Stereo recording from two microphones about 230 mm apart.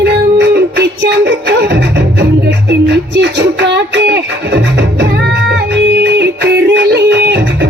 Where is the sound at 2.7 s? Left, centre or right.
Right.